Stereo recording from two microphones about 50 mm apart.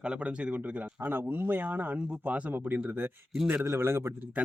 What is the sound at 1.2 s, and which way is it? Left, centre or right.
Speech, right.